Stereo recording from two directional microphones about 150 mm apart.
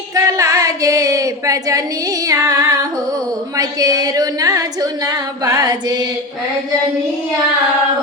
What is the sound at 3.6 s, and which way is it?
Singing, 25° right (ahead or behind).